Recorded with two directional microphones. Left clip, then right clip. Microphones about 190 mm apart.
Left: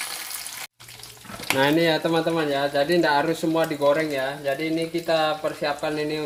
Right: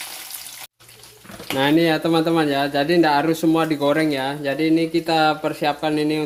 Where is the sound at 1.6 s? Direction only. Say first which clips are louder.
Right 3 dB; 25° right (ahead or behind).